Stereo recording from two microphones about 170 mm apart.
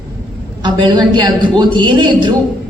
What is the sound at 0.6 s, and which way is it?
A man's voice, 25° right (ahead or behind).